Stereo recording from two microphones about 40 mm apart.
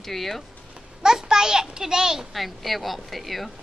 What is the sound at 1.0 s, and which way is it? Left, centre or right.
A child's voice, centre.